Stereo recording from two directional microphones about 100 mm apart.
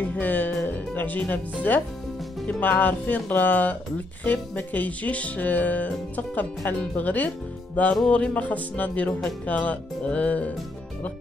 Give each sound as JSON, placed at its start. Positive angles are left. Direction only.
{"t": 0.2, "sound": "music", "side_deg": 15}
{"t": 2.4, "sound": "speech", "side_deg": 20}